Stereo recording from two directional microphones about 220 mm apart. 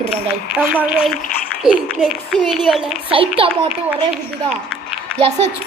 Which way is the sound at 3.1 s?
25° right (ahead or behind).